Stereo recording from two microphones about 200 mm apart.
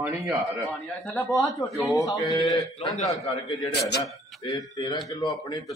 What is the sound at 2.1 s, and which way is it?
Speech, 20° left (ahead or behind).